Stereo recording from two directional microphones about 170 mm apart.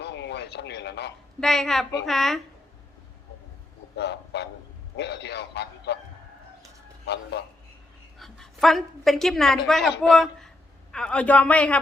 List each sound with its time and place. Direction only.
0.0 s radio: 90° left
1.4 s a man's voice: centre (ahead or behind)
3.9 s a man's voice: 80° left
8.2 s a woman's voice: centre (ahead or behind)